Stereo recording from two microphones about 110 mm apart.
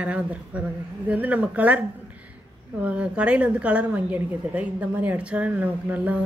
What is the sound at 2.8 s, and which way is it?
A woman's voice, 10° right (ahead or behind).